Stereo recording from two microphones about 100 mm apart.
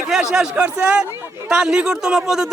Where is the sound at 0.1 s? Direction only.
5° right (ahead or behind).